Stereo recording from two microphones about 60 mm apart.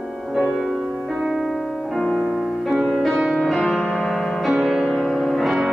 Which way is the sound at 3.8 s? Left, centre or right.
Centre.